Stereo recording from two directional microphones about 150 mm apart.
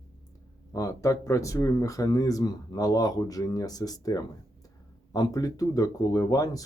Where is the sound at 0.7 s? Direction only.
25° left (ahead or behind).